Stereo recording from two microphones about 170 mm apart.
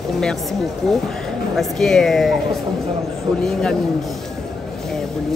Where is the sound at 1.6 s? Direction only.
Centre (ahead or behind).